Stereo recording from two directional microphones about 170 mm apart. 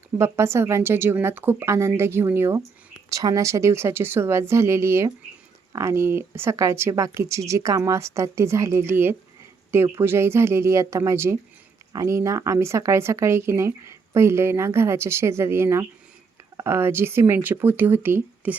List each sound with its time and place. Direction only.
0.2 s speech: 15° right (ahead or behind)